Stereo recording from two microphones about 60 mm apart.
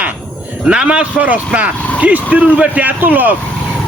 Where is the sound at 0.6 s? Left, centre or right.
Centre.